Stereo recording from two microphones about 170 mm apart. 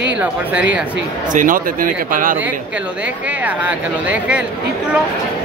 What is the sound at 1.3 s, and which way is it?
Speech, 50° right (ahead or behind).